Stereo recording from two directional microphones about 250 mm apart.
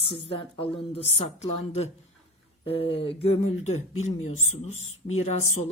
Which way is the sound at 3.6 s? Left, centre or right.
Left.